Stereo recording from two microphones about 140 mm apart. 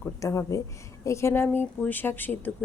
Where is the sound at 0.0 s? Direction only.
20° left (ahead or behind).